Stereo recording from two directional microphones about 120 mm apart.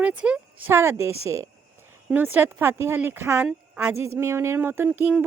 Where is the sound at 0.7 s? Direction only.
20° right (ahead or behind).